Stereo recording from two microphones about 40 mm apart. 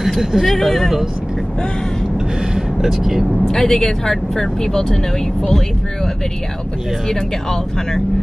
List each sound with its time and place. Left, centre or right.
0.0 s speech: centre
2.5 s a sound: centre
3.4 s speech: centre